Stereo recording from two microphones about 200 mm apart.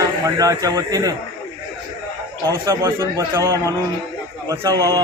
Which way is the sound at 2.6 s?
15° right (ahead or behind).